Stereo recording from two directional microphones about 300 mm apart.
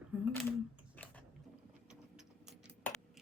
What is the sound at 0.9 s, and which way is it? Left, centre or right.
Biting, centre.